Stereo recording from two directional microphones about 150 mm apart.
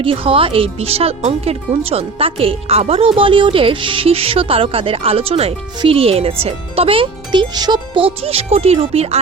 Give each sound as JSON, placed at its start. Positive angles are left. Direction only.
{"t": 0.0, "sound": "speech", "side_deg": -35}